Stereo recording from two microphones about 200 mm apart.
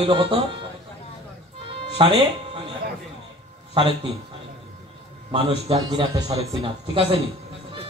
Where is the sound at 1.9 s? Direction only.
25° right (ahead or behind).